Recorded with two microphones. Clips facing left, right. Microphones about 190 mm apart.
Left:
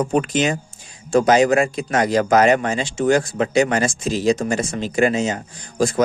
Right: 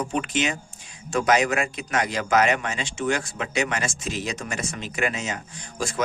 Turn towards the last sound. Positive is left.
turn(degrees=40)  # may be behind; listen again after turning